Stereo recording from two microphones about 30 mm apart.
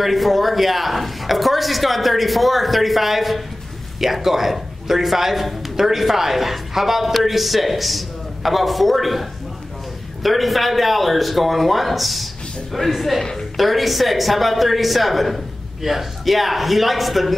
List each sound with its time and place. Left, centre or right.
0.0 s a woman's voice: centre
13.2 s a woman's voice: centre
13.6 s a woman's voice: centre